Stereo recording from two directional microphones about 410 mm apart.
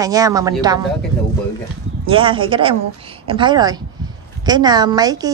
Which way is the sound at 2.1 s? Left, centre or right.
Centre.